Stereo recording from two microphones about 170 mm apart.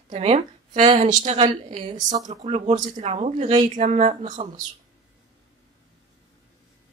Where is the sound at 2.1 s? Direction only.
40° right (ahead or behind).